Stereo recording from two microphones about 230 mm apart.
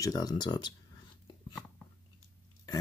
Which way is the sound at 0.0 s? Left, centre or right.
Centre.